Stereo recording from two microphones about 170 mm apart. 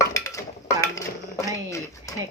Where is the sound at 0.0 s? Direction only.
20° left (ahead or behind).